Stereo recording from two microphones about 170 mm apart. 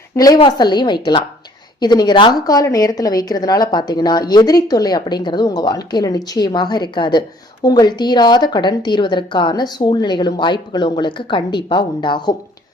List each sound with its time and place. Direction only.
0.3 s a woman's voice: 25° left (ahead or behind)